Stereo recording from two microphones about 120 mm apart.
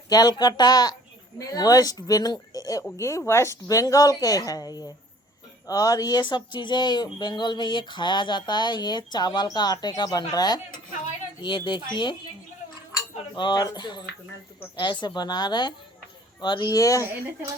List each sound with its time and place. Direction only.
0.1 s speech: 35° left (ahead or behind)
13.3 s speech: 40° left (ahead or behind)